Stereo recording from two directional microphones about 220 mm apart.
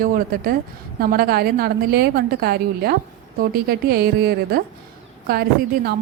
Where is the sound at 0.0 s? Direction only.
40° right (ahead or behind).